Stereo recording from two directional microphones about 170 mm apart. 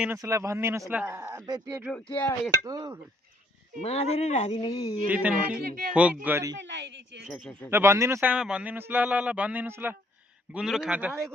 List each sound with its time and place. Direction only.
0.2 s a man's voice: 15° right (ahead or behind)
2.1 s a sound: 10° left (ahead or behind)
2.6 s speech: 20° right (ahead or behind)
3.8 s speech: 40° left (ahead or behind)
4.6 s speech: 20° left (ahead or behind)
5.0 s a man's voice: 10° right (ahead or behind)
6.6 s speech: 90° right
7.3 s speech: centre (ahead or behind)
7.7 s a man's voice: 15° right (ahead or behind)